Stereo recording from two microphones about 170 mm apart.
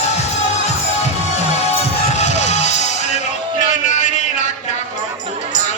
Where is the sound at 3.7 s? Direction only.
45° left (ahead or behind).